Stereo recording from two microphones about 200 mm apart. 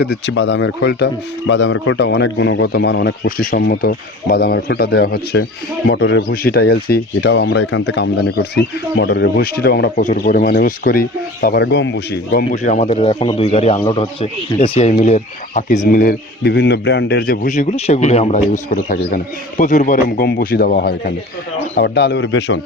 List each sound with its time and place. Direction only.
0.0 s speech: 60° left (ahead or behind)
12.5 s a man's voice: 35° left (ahead or behind); by 22.6 s 65° left (ahead or behind)